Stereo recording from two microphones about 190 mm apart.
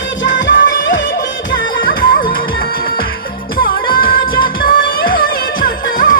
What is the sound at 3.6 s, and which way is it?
Music, 50° left (ahead or behind).